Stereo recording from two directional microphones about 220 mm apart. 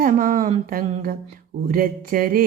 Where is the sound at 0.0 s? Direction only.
40° right (ahead or behind).